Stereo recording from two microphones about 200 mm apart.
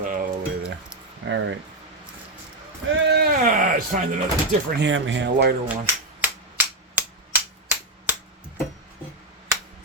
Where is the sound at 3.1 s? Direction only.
50° right (ahead or behind).